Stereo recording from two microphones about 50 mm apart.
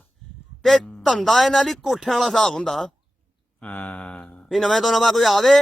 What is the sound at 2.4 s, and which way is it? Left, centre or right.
Speech, centre.